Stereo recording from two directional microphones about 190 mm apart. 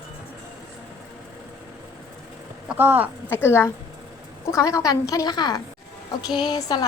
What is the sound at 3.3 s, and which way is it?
A woman's voice, 15° left (ahead or behind).